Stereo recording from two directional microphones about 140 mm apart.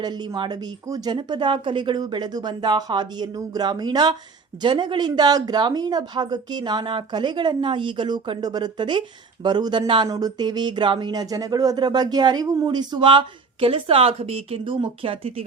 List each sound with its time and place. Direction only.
0.0 s a woman's voice: 30° right (ahead or behind)